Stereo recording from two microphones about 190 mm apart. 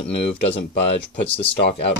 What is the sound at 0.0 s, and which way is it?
Speech, 30° left (ahead or behind).